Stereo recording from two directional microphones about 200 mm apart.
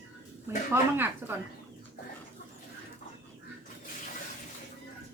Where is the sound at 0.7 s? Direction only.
10° right (ahead or behind).